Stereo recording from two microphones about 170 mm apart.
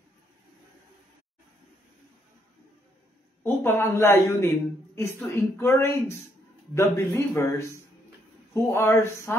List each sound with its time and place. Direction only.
3.4 s a man's voice: 15° left (ahead or behind)